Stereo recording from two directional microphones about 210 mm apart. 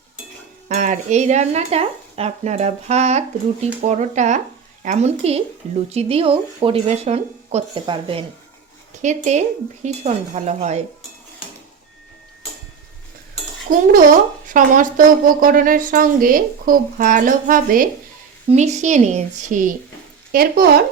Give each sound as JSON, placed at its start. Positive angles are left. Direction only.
{"t": 0.7, "sound": "speech", "side_deg": -35}
{"t": 13.7, "sound": "speech", "side_deg": -45}